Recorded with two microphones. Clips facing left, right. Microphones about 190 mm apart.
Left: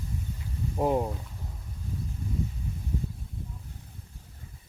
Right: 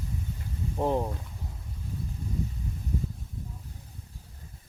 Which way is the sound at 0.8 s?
10° left (ahead or behind).